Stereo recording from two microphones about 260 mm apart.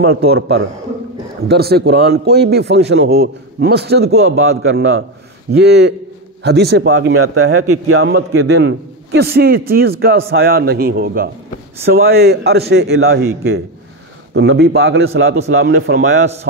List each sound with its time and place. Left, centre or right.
0.0 s a man's voice: right
6.9 s a man's voice: right
9.8 s a man's voice: right
14.3 s a man's voice: right